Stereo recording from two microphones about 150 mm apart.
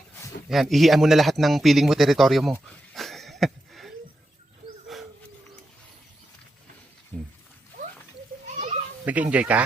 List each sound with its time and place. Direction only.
0.4 s a man's voice: centre (ahead or behind)
2.6 s wheeze: centre (ahead or behind)
4.9 s a sound: centre (ahead or behind)
7.1 s a sound: 25° right (ahead or behind)
8.5 s children playing: 55° right (ahead or behind)
9.0 s speech: 10° right (ahead or behind)